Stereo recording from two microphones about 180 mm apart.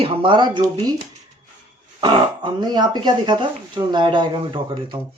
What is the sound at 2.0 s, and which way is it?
A woman's voice, 25° right (ahead or behind).